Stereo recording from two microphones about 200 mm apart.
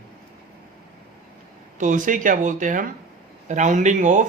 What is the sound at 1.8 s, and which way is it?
A man's voice, 40° right (ahead or behind).